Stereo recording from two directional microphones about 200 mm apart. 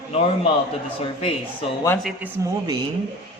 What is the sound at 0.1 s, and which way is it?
A man's voice, 30° left (ahead or behind).